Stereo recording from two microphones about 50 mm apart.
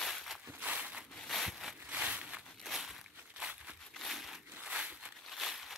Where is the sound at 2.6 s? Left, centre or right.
Centre.